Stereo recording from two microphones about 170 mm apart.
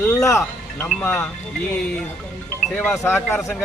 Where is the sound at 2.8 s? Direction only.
10° left (ahead or behind).